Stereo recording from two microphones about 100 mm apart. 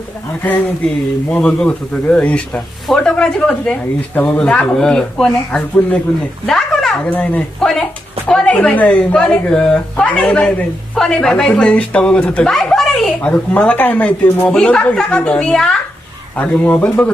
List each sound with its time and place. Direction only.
1.3 s speech: 10° left (ahead or behind)
6.4 s a sound: centre (ahead or behind)
7.0 s speech: 15° left (ahead or behind)